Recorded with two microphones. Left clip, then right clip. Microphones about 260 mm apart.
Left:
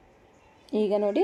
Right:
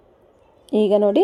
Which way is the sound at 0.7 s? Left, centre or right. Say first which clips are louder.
Right 8 dB; right.